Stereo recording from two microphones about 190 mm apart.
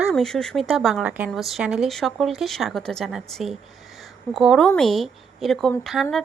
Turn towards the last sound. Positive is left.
turn(degrees=0)  # may be behind; listen again after turning